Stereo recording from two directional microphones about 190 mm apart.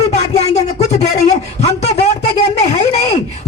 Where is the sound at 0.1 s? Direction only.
35° left (ahead or behind).